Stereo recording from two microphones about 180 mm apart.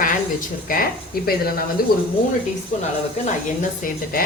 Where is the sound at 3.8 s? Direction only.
55° left (ahead or behind).